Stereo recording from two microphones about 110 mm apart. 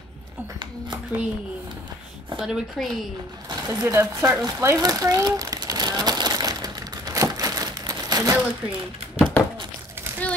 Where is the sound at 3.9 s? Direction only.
25° right (ahead or behind).